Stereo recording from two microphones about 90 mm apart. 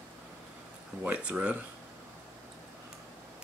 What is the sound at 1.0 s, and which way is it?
Speech, 15° right (ahead or behind).